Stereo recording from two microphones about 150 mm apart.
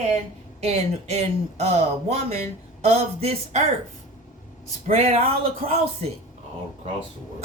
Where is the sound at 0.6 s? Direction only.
45° right (ahead or behind).